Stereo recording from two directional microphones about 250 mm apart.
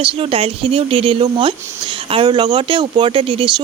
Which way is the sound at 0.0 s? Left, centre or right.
Right.